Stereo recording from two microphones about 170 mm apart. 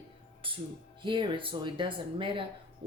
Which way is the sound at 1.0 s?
30° right (ahead or behind).